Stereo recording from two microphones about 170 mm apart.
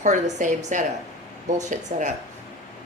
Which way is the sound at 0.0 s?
45° right (ahead or behind).